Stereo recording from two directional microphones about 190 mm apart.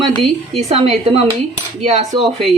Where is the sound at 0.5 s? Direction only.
35° right (ahead or behind).